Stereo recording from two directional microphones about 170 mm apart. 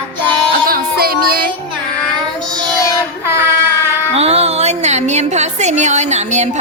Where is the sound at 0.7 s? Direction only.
60° right (ahead or behind).